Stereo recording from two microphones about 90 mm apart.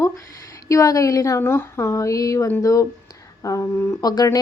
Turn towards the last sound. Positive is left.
turn(degrees=35)  # may be behind; listen again after turning